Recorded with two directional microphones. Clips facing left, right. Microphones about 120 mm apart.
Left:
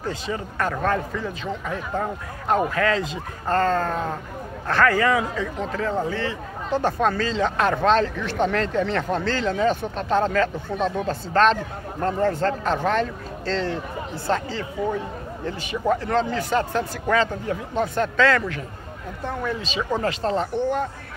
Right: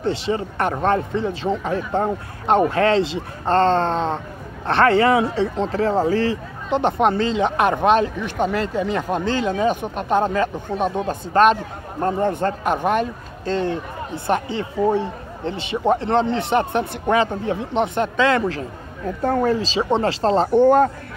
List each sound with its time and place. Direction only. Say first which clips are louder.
0.3 s a man's voice: right 1 dB; 25° right (ahead or behind)
6.7 s a man's voice: right 4 dB; 20° right (ahead or behind)
19.2 s speech: right 9 dB; 45° right (ahead or behind)
19.5 s speech: right 6 dB; 30° right (ahead or behind)
20.5 s speech: right 10 dB; 50° right (ahead or behind)